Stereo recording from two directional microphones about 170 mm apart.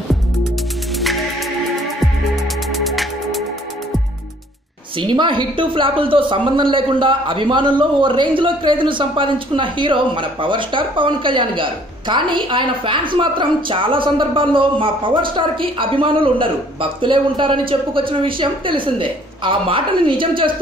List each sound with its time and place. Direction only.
0.9 s music: centre (ahead or behind)
2.7 s music: centre (ahead or behind)
4.9 s speech: 30° right (ahead or behind)